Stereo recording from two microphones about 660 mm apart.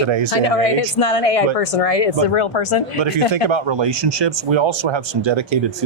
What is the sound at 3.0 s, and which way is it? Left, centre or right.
Speech, right.